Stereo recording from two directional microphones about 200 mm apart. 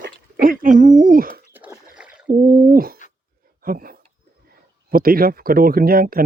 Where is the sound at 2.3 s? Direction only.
45° right (ahead or behind).